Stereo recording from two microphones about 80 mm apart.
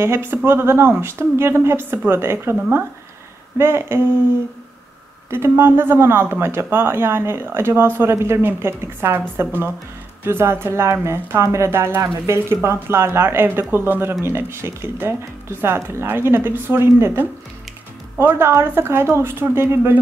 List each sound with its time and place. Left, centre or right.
0.0 s speech: right
3.5 s speech: right
5.3 s speech: right